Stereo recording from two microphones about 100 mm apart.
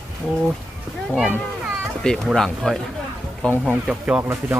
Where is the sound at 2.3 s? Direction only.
5° left (ahead or behind).